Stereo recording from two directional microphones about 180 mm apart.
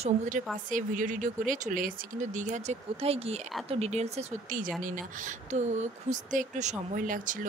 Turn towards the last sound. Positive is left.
turn(degrees=-45)  # may be behind; listen again after turning